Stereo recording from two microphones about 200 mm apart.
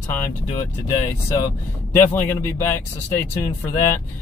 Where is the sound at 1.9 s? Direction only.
10° left (ahead or behind).